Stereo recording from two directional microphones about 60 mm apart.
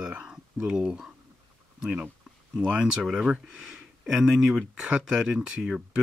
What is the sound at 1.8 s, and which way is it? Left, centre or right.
Speech, right.